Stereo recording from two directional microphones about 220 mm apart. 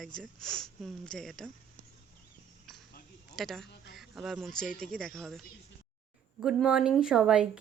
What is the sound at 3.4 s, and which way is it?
Speech, centre (ahead or behind).